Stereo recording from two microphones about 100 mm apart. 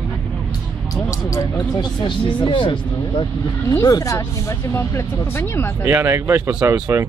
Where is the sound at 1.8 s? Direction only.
50° left (ahead or behind).